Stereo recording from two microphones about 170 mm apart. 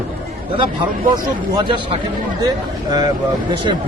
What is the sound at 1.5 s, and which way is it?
Speech, 25° right (ahead or behind).